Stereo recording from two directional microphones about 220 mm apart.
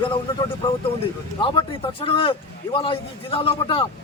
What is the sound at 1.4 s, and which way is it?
A man's voice, 25° left (ahead or behind).